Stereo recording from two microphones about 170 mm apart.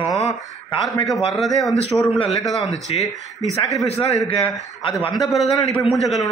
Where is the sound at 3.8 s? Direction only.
40° left (ahead or behind).